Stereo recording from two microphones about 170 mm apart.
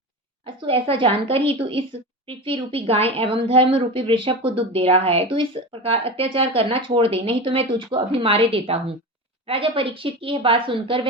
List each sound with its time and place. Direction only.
0.4 s a woman's voice: 30° right (ahead or behind)